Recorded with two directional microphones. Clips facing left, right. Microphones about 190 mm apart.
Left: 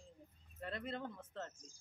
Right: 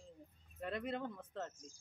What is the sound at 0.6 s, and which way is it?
Speech, 15° right (ahead or behind).